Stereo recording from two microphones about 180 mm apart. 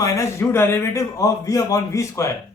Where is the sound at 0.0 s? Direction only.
15° left (ahead or behind).